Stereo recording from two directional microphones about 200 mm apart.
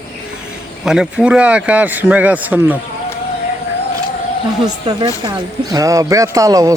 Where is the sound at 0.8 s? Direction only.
5° right (ahead or behind).